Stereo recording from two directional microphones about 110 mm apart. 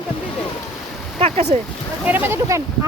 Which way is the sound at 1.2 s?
80° right.